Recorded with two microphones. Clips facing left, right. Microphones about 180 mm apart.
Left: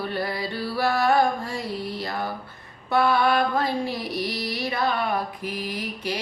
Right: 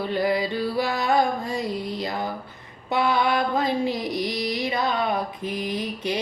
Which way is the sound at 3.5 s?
20° right (ahead or behind).